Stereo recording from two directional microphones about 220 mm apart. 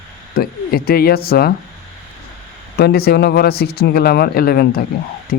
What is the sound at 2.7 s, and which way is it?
Speech, 45° left (ahead or behind).